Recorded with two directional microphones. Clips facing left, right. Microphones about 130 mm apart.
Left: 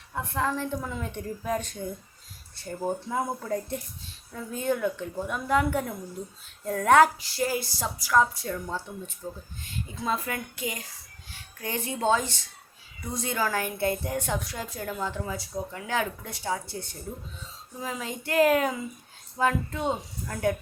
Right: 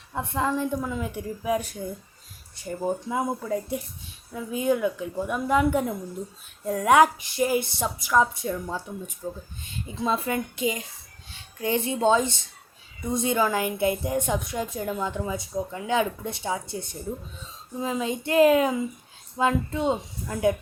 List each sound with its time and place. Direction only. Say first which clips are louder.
0.1 s a woman's voice: right 2 dB; 20° right (ahead or behind)